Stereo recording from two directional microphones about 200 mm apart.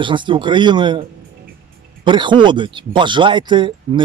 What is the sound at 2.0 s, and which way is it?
Speech, 25° right (ahead or behind).